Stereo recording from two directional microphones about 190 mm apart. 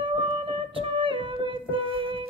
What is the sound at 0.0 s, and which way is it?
Music, 30° right (ahead or behind).